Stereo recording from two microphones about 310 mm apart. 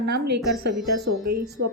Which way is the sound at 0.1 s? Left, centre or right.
Right.